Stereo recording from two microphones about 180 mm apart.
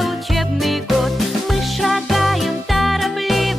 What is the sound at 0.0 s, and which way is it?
Music, centre (ahead or behind).